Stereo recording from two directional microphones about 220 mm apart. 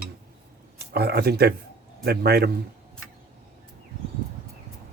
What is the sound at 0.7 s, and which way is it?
Speech, 45° right (ahead or behind).